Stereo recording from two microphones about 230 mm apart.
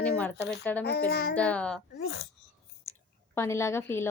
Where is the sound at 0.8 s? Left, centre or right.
Left.